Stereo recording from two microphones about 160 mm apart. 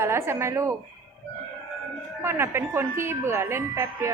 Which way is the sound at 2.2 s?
15° right (ahead or behind).